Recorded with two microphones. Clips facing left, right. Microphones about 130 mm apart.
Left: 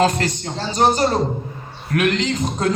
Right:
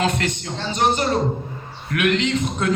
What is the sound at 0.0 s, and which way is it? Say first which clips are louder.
A man's voice: left 4 dB; 35° left (ahead or behind).